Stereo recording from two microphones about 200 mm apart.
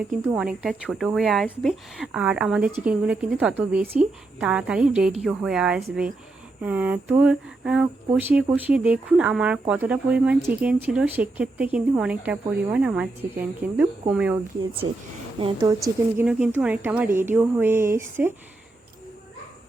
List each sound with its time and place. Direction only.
0.3 s a woman's voice: 5° right (ahead or behind)
15.4 s speech: 20° right (ahead or behind)
16.2 s speech: 5° right (ahead or behind)